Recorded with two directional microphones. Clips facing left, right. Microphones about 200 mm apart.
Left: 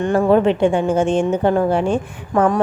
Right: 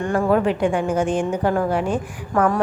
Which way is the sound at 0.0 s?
25° left (ahead or behind).